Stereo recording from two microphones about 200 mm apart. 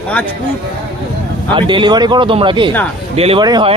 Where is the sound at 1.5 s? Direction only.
25° right (ahead or behind).